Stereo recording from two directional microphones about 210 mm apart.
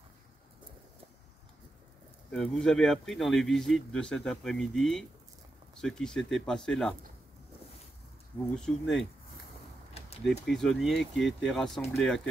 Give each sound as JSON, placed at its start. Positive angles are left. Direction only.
{"t": 2.3, "sound": "speech", "side_deg": 5}
{"t": 8.5, "sound": "speech", "side_deg": 0}
{"t": 9.9, "sound": "a sound", "side_deg": 30}
{"t": 10.4, "sound": "speech", "side_deg": 0}